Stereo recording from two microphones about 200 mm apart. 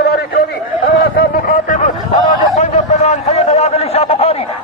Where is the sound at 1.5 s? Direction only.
40° left (ahead or behind).